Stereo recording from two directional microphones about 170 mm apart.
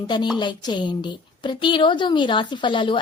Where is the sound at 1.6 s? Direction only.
30° left (ahead or behind).